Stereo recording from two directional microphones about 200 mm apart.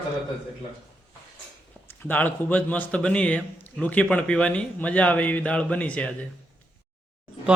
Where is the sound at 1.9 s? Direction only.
10° left (ahead or behind).